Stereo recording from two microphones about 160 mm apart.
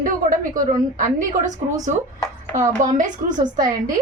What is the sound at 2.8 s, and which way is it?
Speech, 55° right (ahead or behind).